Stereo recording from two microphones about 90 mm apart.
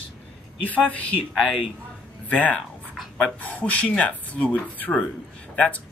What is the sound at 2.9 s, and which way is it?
Speech, centre (ahead or behind).